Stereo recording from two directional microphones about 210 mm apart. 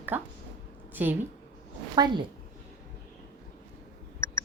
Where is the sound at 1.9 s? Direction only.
20° right (ahead or behind).